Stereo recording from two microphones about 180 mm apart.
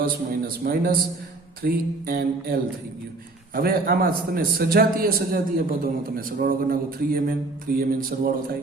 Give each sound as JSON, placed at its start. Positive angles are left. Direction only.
{"t": 0.0, "sound": "a man's voice", "side_deg": -55}